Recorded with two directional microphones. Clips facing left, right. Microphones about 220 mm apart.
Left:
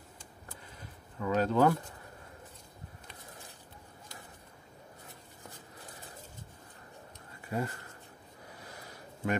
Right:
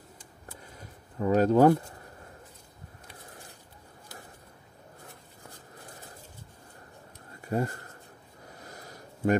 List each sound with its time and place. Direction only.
1.2 s speech: 40° right (ahead or behind)
7.4 s speech: 40° right (ahead or behind)
8.7 s a sound: 40° right (ahead or behind)